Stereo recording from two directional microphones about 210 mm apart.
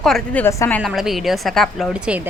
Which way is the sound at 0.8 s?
Centre (ahead or behind).